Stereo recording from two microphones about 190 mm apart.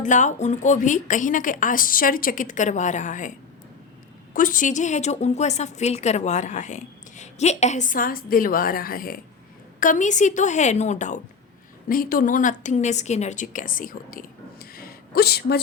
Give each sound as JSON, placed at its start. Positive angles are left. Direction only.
{"t": 0.0, "sound": "a woman's voice", "side_deg": 40}
{"t": 4.4, "sound": "a woman's voice", "side_deg": 45}